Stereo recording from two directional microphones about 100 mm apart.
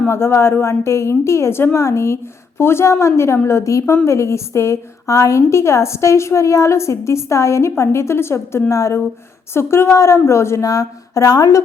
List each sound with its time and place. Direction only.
0.1 s a woman's voice: 25° left (ahead or behind)